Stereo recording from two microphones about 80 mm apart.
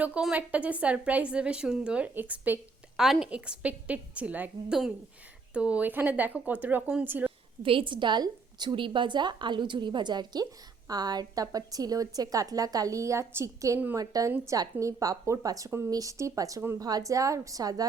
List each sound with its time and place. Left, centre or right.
0.3 s a woman's voice: centre
3.0 s a woman's voice: centre
3.2 s a woman's voice: centre
5.5 s a woman's voice: centre
7.6 s a woman's voice: right
10.4 s a woman's voice: right